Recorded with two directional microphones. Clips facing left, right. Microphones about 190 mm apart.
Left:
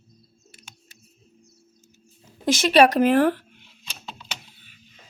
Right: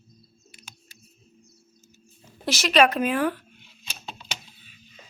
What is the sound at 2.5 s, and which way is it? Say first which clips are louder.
Speech: left 3 dB; 30° left (ahead or behind).